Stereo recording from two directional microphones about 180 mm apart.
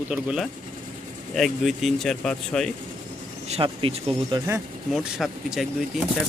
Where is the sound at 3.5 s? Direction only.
30° right (ahead or behind).